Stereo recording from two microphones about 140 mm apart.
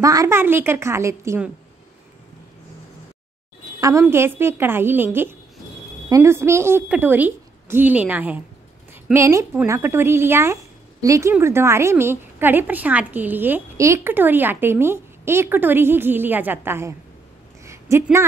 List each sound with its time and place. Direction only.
0.0 s a woman's voice: 25° right (ahead or behind)
4.1 s a woman's voice: 20° right (ahead or behind)
17.6 s a sound: 20° right (ahead or behind)